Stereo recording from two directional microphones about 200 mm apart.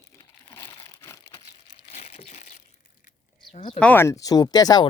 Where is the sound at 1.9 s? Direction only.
30° left (ahead or behind).